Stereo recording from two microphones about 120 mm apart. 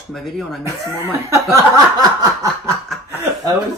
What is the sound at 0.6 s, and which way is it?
Speech, 20° right (ahead or behind).